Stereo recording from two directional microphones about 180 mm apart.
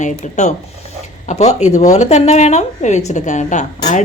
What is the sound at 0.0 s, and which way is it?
Speech, 40° left (ahead or behind).